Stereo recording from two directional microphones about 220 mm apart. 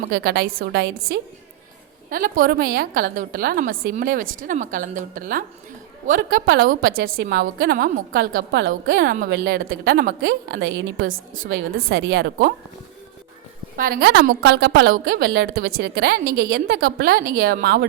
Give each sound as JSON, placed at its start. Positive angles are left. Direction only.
{"t": 0.1, "sound": "a woman's voice", "side_deg": -45}
{"t": 13.7, "sound": "a woman's voice", "side_deg": -40}